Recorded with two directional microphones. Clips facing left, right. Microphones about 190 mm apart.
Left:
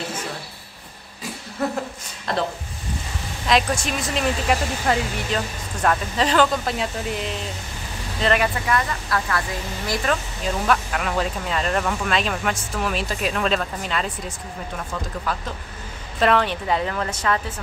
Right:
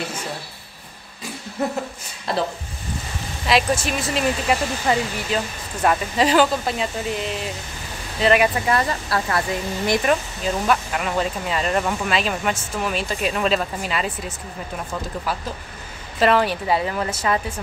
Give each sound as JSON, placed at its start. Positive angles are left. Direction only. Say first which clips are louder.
{"t": 1.6, "sound": "speech", "louder": "right 1 dB", "side_deg": -20}
{"t": 2.3, "sound": "speech", "louder": "right 1 dB", "side_deg": -5}
{"t": 8.6, "sound": "speech", "louder": "right 2 dB", "side_deg": -30}
{"t": 10.4, "sound": "speech", "louder": "right 1 dB", "side_deg": -5}